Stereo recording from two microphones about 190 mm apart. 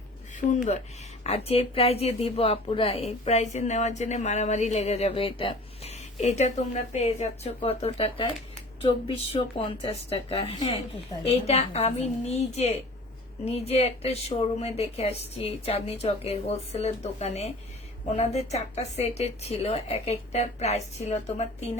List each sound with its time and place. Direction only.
0.5 s a woman's voice: 40° left (ahead or behind)